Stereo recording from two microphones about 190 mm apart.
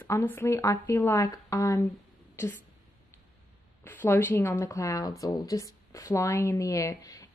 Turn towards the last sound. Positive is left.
turn(degrees=20)  # may be behind; listen again after turning